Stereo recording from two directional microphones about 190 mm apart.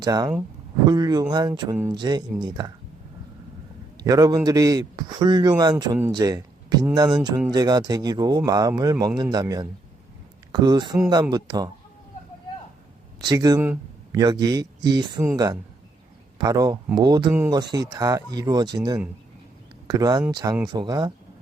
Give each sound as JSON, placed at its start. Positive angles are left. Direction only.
{"t": 0.0, "sound": "speech", "side_deg": -20}
{"t": 4.0, "sound": "speech", "side_deg": -20}
{"t": 13.2, "sound": "speech", "side_deg": -20}
{"t": 16.4, "sound": "speech", "side_deg": -20}
{"t": 19.9, "sound": "speech", "side_deg": -20}